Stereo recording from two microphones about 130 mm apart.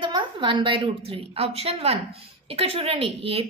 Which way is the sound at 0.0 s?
40° right (ahead or behind).